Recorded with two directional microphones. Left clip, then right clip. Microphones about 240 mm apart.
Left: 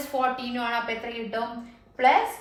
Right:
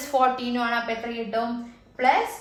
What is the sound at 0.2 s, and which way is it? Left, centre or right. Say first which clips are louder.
A woman's voice: right 4 dB; centre.